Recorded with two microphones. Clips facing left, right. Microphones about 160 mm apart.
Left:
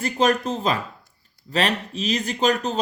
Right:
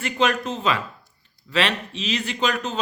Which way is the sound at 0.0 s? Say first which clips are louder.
Left 2 dB; 40° left (ahead or behind).